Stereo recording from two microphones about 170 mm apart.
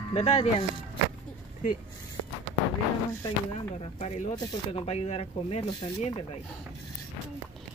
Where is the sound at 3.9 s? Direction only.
45° left (ahead or behind).